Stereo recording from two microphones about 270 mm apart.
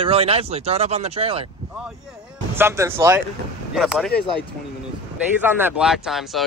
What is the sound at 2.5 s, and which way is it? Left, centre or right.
Speech, centre.